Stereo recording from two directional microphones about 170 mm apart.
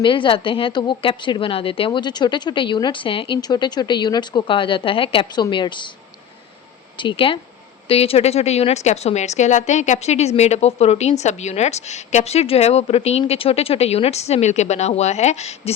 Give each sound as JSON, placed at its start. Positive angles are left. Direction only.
{"t": 0.0, "sound": "a woman's voice", "side_deg": 30}
{"t": 6.9, "sound": "a woman's voice", "side_deg": 30}